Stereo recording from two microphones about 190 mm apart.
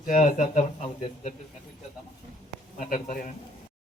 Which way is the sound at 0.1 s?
40° left (ahead or behind).